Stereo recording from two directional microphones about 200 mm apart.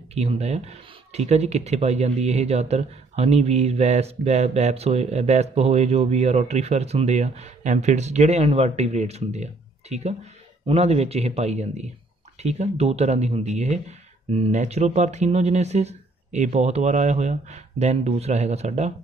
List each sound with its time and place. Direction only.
0.1 s speech: 30° right (ahead or behind)